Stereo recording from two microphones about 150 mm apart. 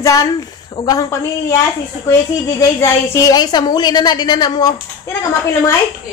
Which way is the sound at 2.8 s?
20° left (ahead or behind).